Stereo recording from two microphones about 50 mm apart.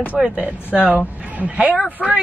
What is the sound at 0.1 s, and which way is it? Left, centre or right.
Speech, right.